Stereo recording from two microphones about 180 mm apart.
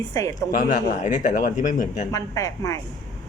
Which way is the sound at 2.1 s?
15° left (ahead or behind).